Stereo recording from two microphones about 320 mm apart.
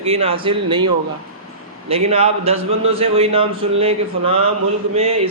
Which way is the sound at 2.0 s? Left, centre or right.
Centre.